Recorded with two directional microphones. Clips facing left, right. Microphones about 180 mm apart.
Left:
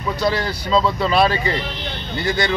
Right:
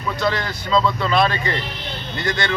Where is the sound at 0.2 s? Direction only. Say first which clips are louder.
Left 2 dB; 35° left (ahead or behind).